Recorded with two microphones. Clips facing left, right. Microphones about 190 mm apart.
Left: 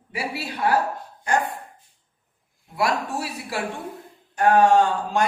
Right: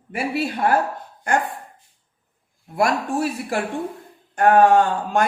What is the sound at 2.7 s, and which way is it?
A woman's voice, 50° right (ahead or behind).